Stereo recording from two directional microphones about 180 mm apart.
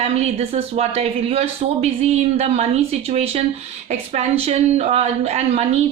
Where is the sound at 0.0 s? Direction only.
35° right (ahead or behind).